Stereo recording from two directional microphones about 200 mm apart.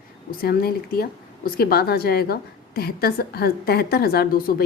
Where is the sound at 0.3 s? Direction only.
50° left (ahead or behind).